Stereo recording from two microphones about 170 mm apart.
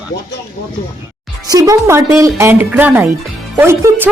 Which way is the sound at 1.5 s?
20° right (ahead or behind).